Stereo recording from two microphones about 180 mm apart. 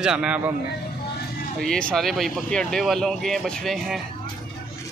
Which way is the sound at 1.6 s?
5° left (ahead or behind).